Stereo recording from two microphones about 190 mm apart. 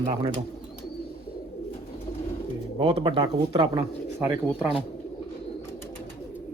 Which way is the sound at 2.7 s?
30° right (ahead or behind).